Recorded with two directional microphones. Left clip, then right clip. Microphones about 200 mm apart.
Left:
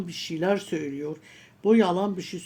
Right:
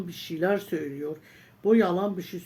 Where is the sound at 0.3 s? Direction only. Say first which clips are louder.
Even; 35° left (ahead or behind).